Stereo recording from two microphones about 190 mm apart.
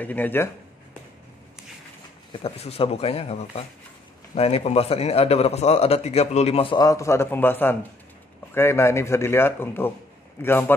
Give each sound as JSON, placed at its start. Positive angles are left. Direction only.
{"t": 0.0, "sound": "a man's voice", "side_deg": 10}
{"t": 2.4, "sound": "a man's voice", "side_deg": 30}